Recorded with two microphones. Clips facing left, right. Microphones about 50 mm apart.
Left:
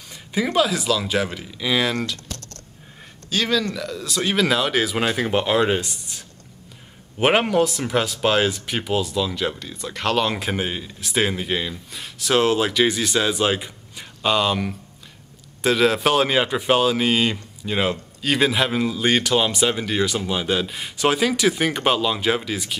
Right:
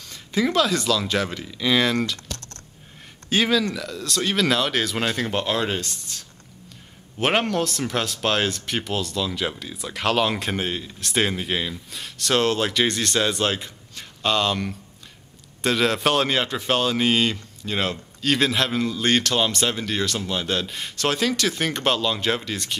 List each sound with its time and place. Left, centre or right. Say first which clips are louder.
0.1 s speech: even; centre
3.3 s speech: right 2 dB; right
3.7 s speech: left 1 dB; centre